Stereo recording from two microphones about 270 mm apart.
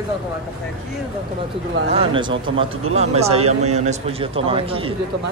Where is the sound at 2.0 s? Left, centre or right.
Centre.